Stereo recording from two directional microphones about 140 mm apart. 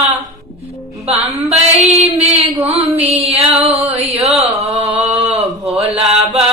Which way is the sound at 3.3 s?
45° right (ahead or behind).